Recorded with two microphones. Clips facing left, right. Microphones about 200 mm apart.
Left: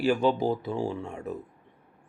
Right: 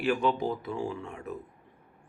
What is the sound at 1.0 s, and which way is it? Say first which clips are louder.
Speech: left 4 dB; 40° left (ahead or behind).